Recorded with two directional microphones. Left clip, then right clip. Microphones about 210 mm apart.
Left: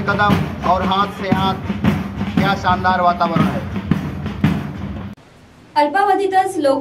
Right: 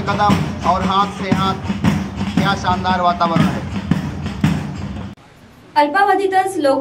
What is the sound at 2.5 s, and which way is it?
Speech, 40° left (ahead or behind).